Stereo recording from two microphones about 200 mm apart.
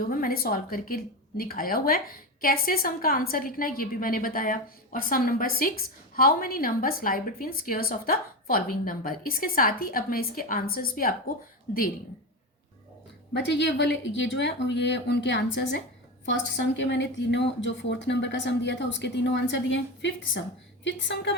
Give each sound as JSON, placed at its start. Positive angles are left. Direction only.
{"t": 0.1, "sound": "a woman's voice", "side_deg": 45}
{"t": 13.3, "sound": "speech", "side_deg": 60}